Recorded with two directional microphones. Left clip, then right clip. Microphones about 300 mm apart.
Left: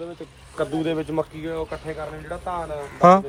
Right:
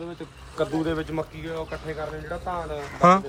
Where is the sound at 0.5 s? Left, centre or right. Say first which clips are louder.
Left 1 dB; left.